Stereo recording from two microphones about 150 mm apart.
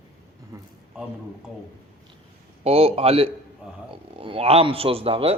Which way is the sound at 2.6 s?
40° right (ahead or behind).